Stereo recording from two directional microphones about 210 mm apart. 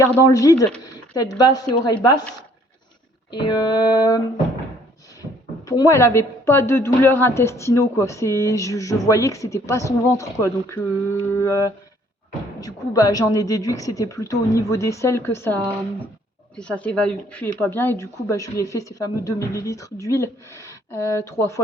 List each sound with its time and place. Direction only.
0.0 s speech: 15° left (ahead or behind)
3.3 s music: 20° left (ahead or behind)
5.6 s speech: 15° left (ahead or behind)
16.6 s speech: 5° left (ahead or behind)